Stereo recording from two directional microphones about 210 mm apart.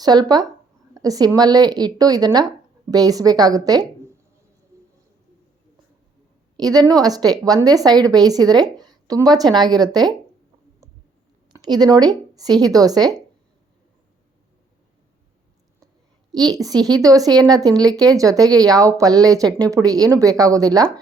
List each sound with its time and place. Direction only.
0.0 s a woman's voice: 20° right (ahead or behind)
6.6 s a woman's voice: 20° right (ahead or behind)
11.5 s a woman's voice: 20° right (ahead or behind)
16.5 s speech: 15° right (ahead or behind)